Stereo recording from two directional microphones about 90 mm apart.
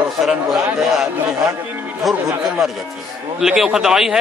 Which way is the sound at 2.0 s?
Centre (ahead or behind).